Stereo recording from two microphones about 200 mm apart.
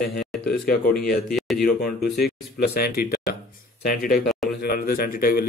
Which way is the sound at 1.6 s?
50° left (ahead or behind).